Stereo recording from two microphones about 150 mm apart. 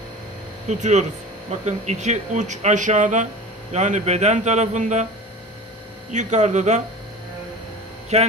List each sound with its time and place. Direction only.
0.7 s speech: 50° right (ahead or behind)
6.1 s speech: 50° right (ahead or behind)
8.1 s speech: 45° right (ahead or behind)